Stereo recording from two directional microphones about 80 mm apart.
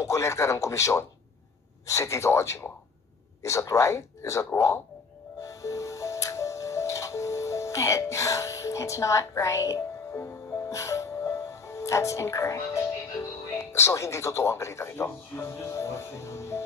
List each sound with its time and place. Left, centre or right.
0.0 s speech: left
5.4 s music: left
13.5 s speech: left